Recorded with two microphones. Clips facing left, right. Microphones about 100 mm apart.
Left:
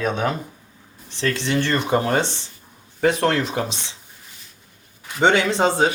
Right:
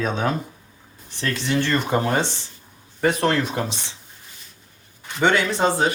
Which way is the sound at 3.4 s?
15° left (ahead or behind).